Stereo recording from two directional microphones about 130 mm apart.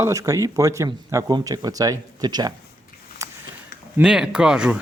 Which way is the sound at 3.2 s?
25° right (ahead or behind).